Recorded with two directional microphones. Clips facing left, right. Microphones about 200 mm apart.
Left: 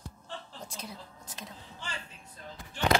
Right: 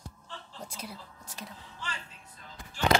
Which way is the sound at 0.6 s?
10° right (ahead or behind).